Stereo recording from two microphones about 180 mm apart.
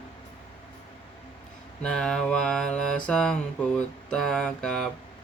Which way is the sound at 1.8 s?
5° left (ahead or behind).